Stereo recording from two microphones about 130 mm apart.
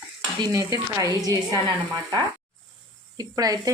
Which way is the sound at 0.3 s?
30° right (ahead or behind).